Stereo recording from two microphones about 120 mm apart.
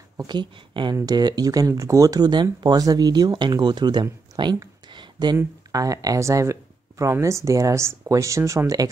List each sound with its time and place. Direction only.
0.3 s speech: 40° right (ahead or behind)
5.7 s speech: 30° right (ahead or behind)